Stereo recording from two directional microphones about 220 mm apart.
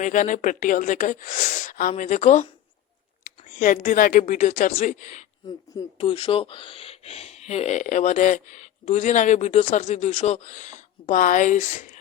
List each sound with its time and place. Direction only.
0.0 s speech: 35° left (ahead or behind)
5.5 s speech: 20° left (ahead or behind)